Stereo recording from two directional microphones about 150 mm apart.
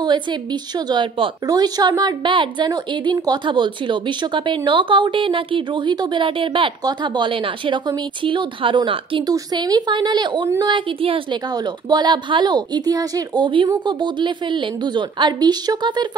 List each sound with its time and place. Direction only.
0.0 s a woman's voice: 30° right (ahead or behind)